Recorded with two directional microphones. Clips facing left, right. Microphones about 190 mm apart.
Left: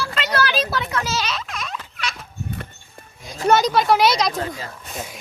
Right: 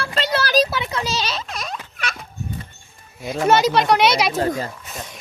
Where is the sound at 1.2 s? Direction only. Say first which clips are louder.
Even; 35° right (ahead or behind).